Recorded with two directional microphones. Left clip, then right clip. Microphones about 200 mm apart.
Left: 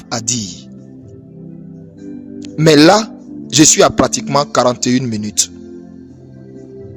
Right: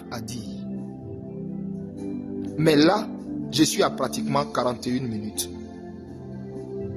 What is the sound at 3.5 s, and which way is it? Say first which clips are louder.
Music: left 12 dB; 45° left (ahead or behind).